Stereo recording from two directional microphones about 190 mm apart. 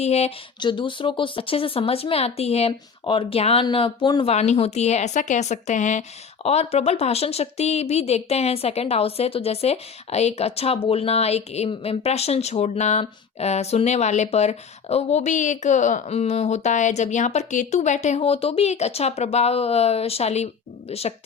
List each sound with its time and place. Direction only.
0.0 s speech: 35° left (ahead or behind)